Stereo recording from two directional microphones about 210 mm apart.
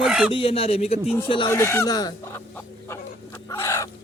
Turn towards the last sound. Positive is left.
turn(degrees=15)  # may be behind; listen again after turning